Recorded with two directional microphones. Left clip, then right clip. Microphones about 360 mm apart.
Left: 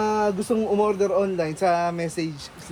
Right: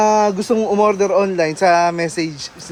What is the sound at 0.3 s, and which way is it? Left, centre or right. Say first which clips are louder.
Speech: right 7 dB; right.